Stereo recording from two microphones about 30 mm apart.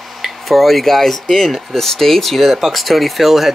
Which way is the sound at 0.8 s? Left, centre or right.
Centre.